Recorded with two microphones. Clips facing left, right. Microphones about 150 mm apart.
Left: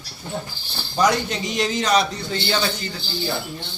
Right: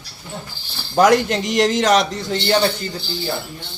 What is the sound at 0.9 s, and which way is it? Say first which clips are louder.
A man's voice: right 6 dB; 90° right.